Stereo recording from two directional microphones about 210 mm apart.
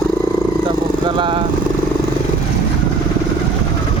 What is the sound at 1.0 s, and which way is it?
Speech, 25° right (ahead or behind).